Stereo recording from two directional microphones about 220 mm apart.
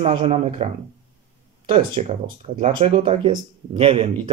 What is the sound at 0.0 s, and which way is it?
Speech, 25° right (ahead or behind).